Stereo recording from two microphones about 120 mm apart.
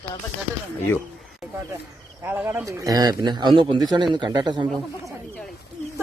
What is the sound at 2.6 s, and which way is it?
Speech, 30° right (ahead or behind).